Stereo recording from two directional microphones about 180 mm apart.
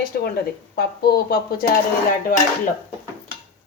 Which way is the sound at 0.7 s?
60° left (ahead or behind).